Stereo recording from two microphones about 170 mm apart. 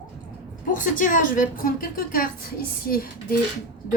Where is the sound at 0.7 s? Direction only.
50° left (ahead or behind).